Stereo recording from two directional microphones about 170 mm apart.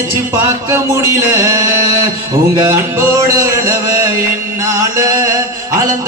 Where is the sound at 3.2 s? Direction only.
20° right (ahead or behind).